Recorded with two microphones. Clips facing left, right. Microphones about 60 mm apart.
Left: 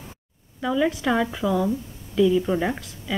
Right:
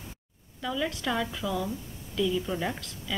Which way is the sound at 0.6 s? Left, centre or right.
Centre.